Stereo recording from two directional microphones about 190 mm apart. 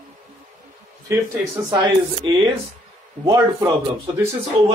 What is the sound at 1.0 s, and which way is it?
Speech, 15° right (ahead or behind).